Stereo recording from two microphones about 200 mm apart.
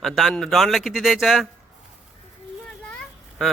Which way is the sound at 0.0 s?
Centre (ahead or behind).